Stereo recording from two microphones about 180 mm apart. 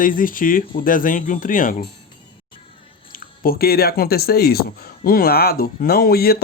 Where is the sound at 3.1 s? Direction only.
55° left (ahead or behind).